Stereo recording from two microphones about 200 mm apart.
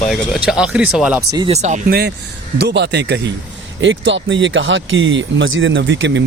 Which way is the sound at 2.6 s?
60° right (ahead or behind).